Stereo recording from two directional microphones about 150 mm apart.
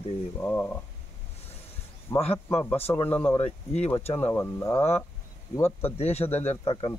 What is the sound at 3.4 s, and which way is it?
Speech, 45° left (ahead or behind).